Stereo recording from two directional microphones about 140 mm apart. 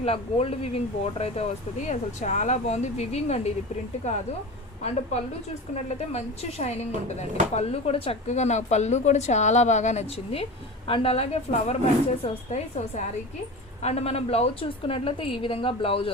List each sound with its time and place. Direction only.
0.0 s speech: 45° left (ahead or behind)
5.9 s speech: 50° left (ahead or behind)
10.8 s speech: 40° left (ahead or behind)
13.8 s a woman's voice: 50° left (ahead or behind)